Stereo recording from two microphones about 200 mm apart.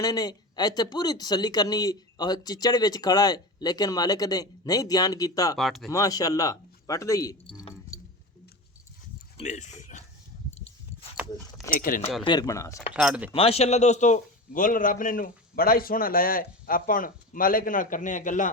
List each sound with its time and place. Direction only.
0.0 s speech: 20° left (ahead or behind)
5.5 s speech: centre (ahead or behind)
5.9 s speech: 15° left (ahead or behind)
9.4 s speech: 35° left (ahead or behind)
11.7 s a man's voice: 45° left (ahead or behind)
12.2 s speech: 20° left (ahead or behind)
12.9 s speech: 5° right (ahead or behind)
13.3 s a man's voice: 30° left (ahead or behind)